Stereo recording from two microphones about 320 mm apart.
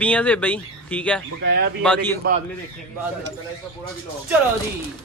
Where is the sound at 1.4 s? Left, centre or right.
Right.